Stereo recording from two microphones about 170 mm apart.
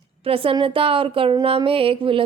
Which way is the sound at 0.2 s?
35° right (ahead or behind).